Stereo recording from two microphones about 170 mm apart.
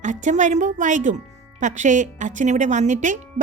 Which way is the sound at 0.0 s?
45° right (ahead or behind).